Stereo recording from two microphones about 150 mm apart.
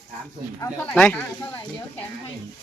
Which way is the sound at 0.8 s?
10° left (ahead or behind).